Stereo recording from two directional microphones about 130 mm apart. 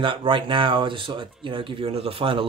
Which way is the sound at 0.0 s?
40° right (ahead or behind).